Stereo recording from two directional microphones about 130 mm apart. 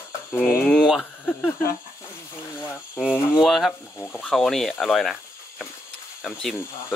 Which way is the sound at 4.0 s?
10° left (ahead or behind).